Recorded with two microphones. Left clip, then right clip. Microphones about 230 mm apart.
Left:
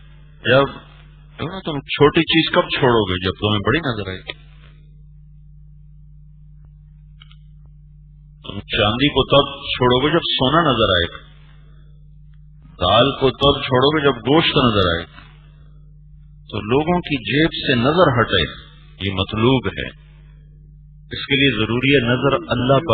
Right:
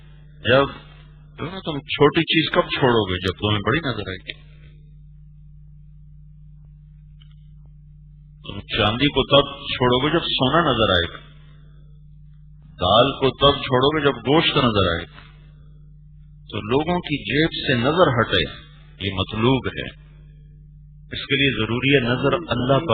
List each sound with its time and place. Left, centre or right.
0.5 s a man's voice: right
8.5 s a man's voice: right
12.8 s a man's voice: centre
16.5 s a man's voice: centre
21.4 s a man's voice: centre